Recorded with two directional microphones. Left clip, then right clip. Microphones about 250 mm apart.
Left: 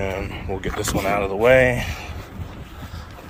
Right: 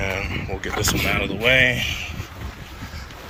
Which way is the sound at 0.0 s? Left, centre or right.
Centre.